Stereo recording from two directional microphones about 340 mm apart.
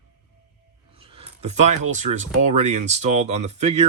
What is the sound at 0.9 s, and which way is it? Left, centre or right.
Speech, centre.